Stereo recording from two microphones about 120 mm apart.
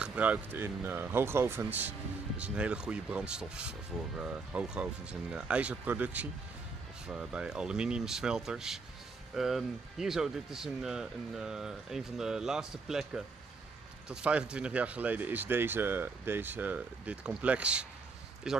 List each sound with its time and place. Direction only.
0.0 s speech: 10° right (ahead or behind)